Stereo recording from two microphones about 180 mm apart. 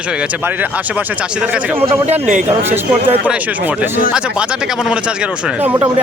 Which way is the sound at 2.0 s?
45° right (ahead or behind).